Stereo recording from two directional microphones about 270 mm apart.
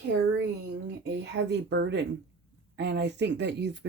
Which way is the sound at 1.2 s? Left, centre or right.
Right.